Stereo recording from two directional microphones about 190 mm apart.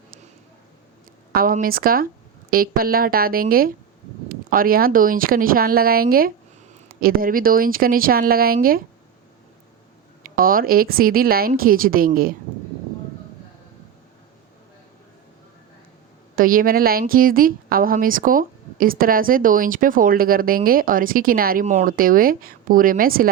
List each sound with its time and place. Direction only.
1.3 s a woman's voice: 50° right (ahead or behind)
10.2 s a woman's voice: 50° right (ahead or behind)
16.3 s a woman's voice: 50° right (ahead or behind)